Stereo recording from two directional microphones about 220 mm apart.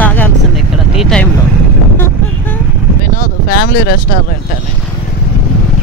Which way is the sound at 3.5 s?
40° left (ahead or behind).